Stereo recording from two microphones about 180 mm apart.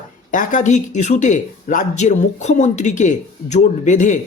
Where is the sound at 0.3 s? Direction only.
45° left (ahead or behind).